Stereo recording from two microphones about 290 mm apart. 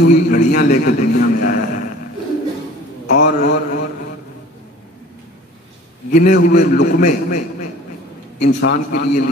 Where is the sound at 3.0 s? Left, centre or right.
Left.